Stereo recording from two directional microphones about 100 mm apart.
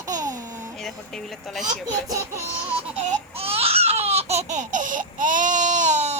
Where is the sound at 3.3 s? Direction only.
75° right (ahead or behind).